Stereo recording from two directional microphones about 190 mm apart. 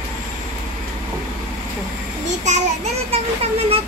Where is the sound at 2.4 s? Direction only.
35° right (ahead or behind).